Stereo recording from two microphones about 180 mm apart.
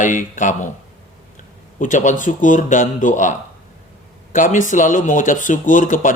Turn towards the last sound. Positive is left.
turn(degrees=45)  # may be behind; listen again after turning